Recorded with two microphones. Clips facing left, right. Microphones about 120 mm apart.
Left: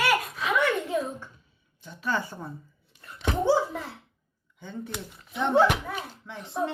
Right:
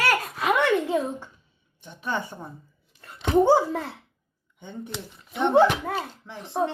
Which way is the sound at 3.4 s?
50° right (ahead or behind).